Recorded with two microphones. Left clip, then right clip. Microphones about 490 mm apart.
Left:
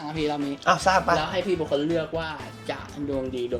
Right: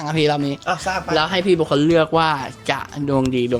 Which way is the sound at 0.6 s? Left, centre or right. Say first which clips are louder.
Left 2 dB; centre.